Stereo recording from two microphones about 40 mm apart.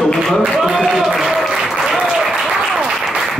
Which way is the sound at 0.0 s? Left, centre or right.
Centre.